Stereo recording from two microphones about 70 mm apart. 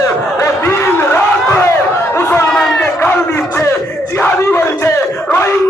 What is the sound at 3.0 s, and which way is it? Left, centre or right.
A man's voice, left.